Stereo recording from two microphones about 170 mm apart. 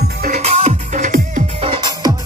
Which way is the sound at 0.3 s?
40° right (ahead or behind).